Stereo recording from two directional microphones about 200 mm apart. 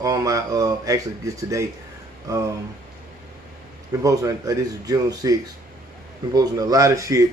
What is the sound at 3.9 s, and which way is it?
Speech, 15° right (ahead or behind).